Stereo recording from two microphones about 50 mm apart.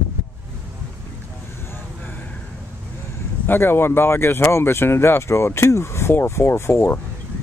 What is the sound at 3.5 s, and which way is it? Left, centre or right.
Speech, left.